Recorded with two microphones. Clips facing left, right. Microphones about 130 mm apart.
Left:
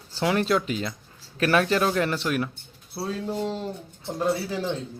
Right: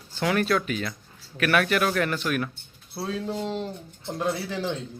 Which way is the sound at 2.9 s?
5° left (ahead or behind).